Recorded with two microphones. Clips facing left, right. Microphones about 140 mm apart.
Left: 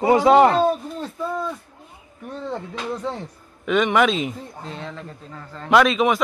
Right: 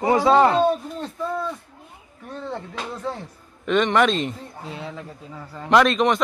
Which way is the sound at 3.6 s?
5° left (ahead or behind).